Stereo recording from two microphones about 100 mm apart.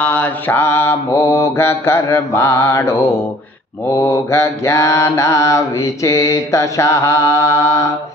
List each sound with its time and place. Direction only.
0.0 s mantra: 15° left (ahead or behind); by 7.8 s 30° left (ahead or behind)